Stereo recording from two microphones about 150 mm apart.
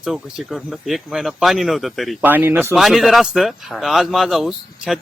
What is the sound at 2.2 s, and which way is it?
Speech, 15° right (ahead or behind).